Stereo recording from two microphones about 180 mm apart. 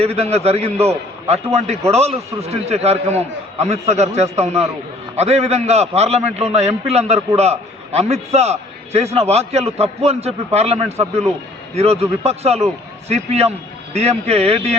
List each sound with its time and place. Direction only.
0.0 s a man's voice: 35° right (ahead or behind)